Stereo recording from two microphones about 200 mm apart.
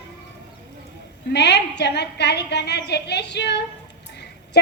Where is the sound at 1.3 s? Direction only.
55° left (ahead or behind).